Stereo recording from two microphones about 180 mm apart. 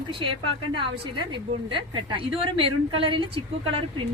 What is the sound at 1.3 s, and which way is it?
Speech, 30° right (ahead or behind).